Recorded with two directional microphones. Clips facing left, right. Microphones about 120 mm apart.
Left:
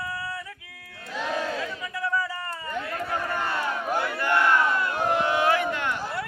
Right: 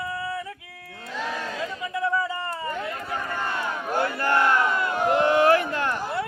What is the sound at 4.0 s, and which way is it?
Battle cry, 40° right (ahead or behind).